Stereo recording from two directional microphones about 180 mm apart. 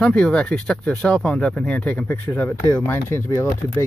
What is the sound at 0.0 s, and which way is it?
Speech, 5° left (ahead or behind).